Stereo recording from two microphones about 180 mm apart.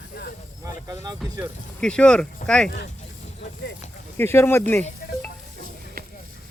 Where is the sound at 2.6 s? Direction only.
70° left (ahead or behind).